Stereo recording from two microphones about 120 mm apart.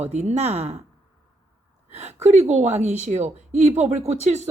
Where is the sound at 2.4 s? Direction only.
70° right (ahead or behind).